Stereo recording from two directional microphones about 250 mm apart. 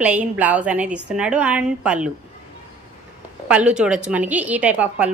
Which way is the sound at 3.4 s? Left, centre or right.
Centre.